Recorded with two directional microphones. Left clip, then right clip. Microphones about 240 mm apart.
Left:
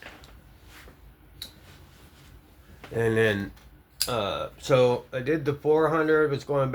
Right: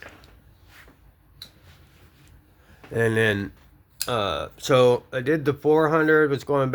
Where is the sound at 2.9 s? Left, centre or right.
Right.